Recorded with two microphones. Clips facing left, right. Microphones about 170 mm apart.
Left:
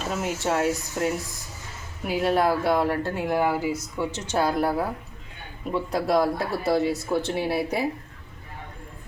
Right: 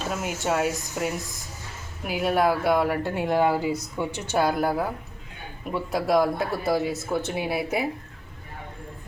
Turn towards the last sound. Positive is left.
turn(degrees=0)  # may be behind; listen again after turning